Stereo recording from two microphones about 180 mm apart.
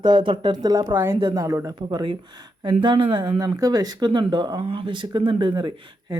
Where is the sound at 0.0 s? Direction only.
25° right (ahead or behind).